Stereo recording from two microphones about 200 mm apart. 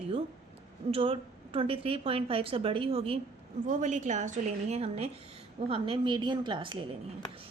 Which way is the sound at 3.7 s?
40° right (ahead or behind).